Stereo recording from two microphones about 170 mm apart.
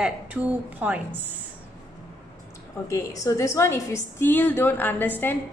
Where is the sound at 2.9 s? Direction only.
20° left (ahead or behind).